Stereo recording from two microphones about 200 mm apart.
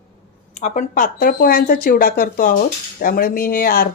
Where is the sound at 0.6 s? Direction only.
35° left (ahead or behind).